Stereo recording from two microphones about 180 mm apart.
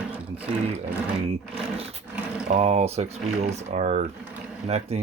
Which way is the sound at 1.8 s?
35° right (ahead or behind).